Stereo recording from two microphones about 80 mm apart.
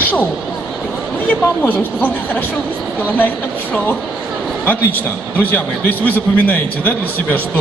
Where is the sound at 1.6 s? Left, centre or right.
Left.